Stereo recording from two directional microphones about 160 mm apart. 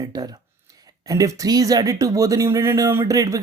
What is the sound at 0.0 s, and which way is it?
Speech, 25° right (ahead or behind).